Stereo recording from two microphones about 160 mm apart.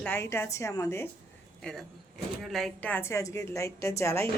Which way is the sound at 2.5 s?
Centre (ahead or behind).